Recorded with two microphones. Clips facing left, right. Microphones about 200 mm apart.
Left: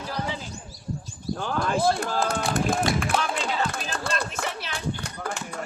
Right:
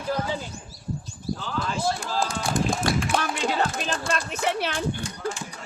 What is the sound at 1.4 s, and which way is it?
Clip-clop, 50° left (ahead or behind).